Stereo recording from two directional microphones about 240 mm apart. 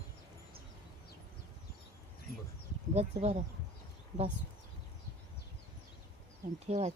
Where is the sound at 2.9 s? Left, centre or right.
Right.